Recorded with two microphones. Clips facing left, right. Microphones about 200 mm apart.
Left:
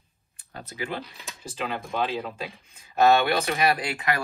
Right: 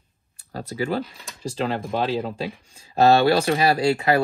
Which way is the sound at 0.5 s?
35° right (ahead or behind).